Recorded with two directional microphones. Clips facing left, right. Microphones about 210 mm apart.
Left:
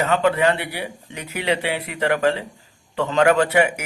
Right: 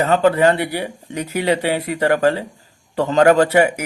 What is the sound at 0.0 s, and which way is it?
Speech, 35° right (ahead or behind).